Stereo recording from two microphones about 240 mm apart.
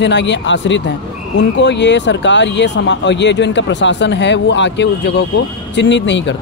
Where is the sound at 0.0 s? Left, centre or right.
Left.